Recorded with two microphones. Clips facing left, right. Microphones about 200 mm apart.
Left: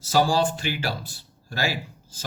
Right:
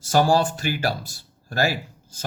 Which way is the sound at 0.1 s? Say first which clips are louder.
Right 2 dB; 50° right (ahead or behind).